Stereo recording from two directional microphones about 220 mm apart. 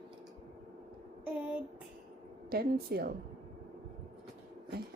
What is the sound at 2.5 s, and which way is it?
Speech, 45° right (ahead or behind).